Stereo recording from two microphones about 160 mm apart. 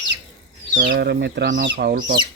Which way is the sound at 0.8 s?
85° right.